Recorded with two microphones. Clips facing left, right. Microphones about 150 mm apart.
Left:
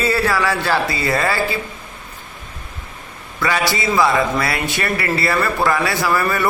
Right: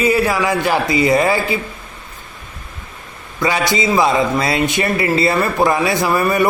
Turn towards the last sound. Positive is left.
turn(degrees=-20)  # may be behind; listen again after turning